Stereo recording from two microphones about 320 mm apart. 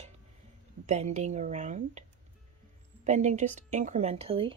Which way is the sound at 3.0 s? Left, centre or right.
Right.